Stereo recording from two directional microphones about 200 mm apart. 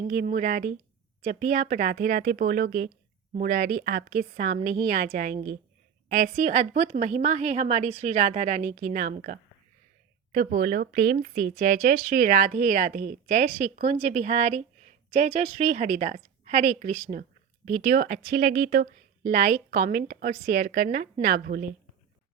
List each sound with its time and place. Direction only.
0.1 s a woman's voice: 45° right (ahead or behind)